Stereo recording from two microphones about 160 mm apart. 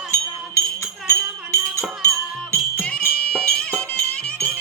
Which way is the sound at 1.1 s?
15° left (ahead or behind).